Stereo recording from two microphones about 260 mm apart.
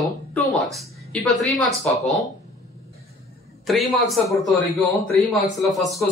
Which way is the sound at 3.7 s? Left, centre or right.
Centre.